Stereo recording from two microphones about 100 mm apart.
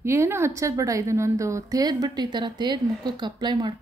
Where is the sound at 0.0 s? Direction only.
25° right (ahead or behind).